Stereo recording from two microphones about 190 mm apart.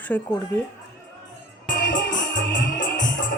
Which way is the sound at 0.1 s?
10° left (ahead or behind).